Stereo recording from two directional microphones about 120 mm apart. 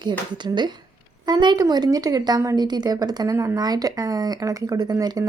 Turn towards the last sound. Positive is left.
turn(degrees=-30)  # may be behind; listen again after turning